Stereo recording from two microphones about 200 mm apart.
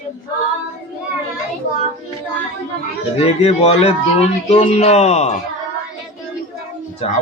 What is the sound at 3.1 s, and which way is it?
Speech, 30° left (ahead or behind).